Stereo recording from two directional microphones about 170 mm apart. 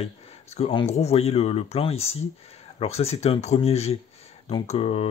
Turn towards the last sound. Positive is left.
turn(degrees=35)  # may be behind; listen again after turning